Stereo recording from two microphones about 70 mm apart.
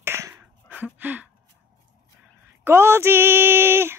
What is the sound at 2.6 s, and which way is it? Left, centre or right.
Speech, right.